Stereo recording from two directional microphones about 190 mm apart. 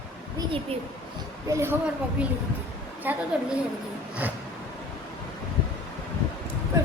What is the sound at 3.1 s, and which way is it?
Speech, 10° right (ahead or behind).